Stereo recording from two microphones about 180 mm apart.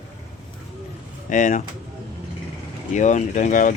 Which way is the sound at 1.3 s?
40° left (ahead or behind).